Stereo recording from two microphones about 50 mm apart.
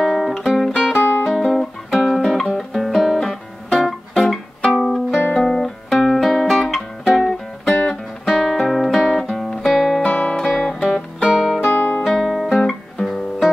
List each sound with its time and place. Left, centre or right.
0.0 s music: centre
1.3 s guitar: centre
2.5 s music: centre
10.0 s music: left
10.5 s music: centre
11.7 s guitar: left
12.1 s guitar: centre